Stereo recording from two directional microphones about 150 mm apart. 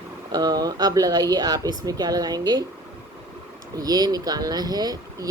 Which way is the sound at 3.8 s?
25° right (ahead or behind).